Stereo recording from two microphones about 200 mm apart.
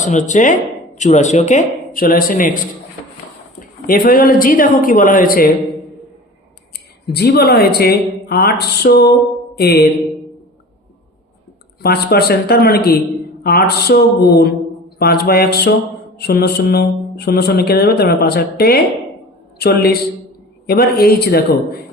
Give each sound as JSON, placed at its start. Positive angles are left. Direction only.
{"t": 0.0, "sound": "speech", "side_deg": 35}
{"t": 3.8, "sound": "speech", "side_deg": 45}
{"t": 7.1, "sound": "speech", "side_deg": 50}
{"t": 9.6, "sound": "mantra", "side_deg": 55}
{"t": 11.8, "sound": "a man's voice", "side_deg": 50}